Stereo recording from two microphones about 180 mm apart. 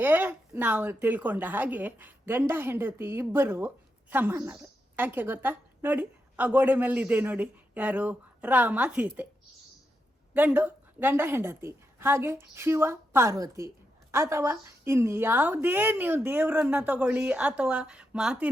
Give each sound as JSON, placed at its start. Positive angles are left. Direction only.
{"t": 0.0, "sound": "a woman's voice", "side_deg": -10}
{"t": 10.3, "sound": "a woman's voice", "side_deg": -10}